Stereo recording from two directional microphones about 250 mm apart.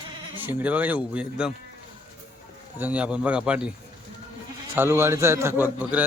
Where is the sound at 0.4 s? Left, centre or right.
Centre.